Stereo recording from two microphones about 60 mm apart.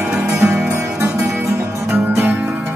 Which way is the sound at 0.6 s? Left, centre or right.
Right.